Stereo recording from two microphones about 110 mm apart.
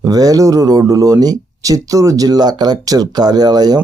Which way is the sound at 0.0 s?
35° right (ahead or behind).